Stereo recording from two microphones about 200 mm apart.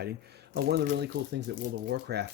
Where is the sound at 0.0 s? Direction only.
55° right (ahead or behind).